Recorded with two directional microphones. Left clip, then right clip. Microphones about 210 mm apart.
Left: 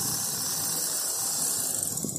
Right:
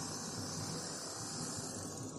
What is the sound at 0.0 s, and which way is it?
Engine, 50° left (ahead or behind).